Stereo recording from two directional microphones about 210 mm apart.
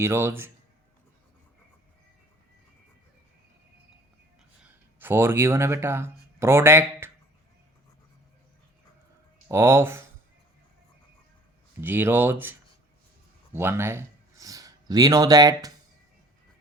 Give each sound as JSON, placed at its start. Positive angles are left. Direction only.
{"t": 0.0, "sound": "speech", "side_deg": -10}
{"t": 4.6, "sound": "speech", "side_deg": -10}
{"t": 9.5, "sound": "speech", "side_deg": -10}
{"t": 11.8, "sound": "speech", "side_deg": -10}